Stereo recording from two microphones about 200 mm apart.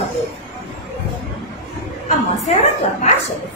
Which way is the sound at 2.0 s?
35° left (ahead or behind).